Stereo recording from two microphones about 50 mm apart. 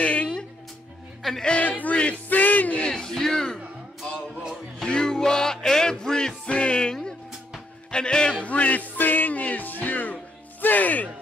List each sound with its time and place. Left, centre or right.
0.0 s music: left
1.6 s music: left
2.2 s a sound: left
2.9 s speech: centre
4.8 s music: centre
8.5 s music: left